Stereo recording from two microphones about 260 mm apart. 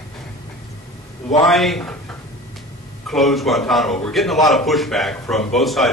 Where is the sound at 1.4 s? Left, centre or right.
Centre.